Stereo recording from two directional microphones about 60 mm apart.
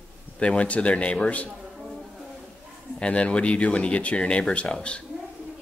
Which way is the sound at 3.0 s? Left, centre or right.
Centre.